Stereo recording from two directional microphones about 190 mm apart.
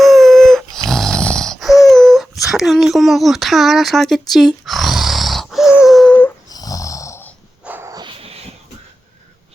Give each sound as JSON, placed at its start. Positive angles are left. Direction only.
{"t": 0.0, "sound": "dog", "side_deg": 0}
{"t": 2.4, "sound": "a sound", "side_deg": 0}
{"t": 6.5, "sound": "snoring", "side_deg": 20}
{"t": 7.6, "sound": "dog", "side_deg": -10}